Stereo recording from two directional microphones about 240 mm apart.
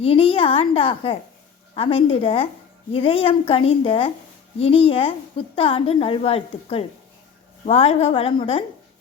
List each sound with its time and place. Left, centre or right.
0.0 s a woman's voice: left